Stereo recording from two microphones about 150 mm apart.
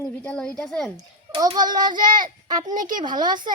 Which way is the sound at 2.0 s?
65° right (ahead or behind).